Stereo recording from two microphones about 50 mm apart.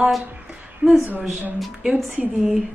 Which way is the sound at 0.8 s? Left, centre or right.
Right.